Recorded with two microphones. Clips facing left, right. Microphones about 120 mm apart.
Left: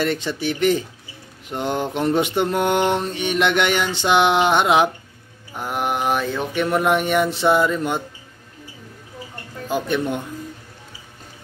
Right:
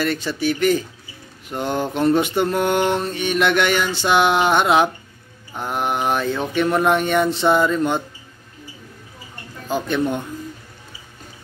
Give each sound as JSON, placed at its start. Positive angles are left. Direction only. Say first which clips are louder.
{"t": 0.0, "sound": "mantra", "louder": "right 1 dB", "side_deg": 20}
{"t": 5.5, "sound": "mantra", "louder": "right 1 dB", "side_deg": 5}
{"t": 9.7, "sound": "speech", "louder": "right 1 dB", "side_deg": 10}